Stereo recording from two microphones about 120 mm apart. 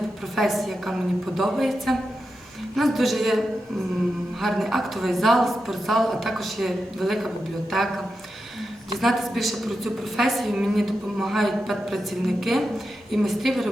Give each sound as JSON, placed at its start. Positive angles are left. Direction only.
{"t": 0.3, "sound": "a woman's voice", "side_deg": 0}